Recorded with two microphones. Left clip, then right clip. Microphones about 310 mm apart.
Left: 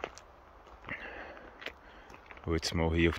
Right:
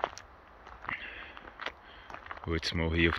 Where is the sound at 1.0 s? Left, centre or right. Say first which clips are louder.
Even; centre.